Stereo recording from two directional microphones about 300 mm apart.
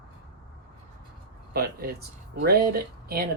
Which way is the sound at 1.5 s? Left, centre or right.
Right.